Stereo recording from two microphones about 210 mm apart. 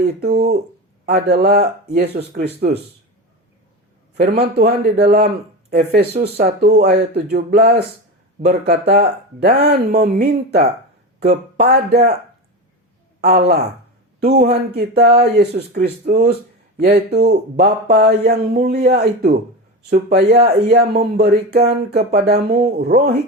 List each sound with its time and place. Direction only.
0.2 s speech: 50° right (ahead or behind)
4.2 s speech: 45° right (ahead or behind)
13.2 s a man's voice: 50° right (ahead or behind)